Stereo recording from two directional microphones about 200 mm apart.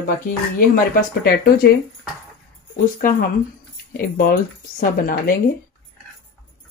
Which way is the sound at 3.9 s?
50° left (ahead or behind).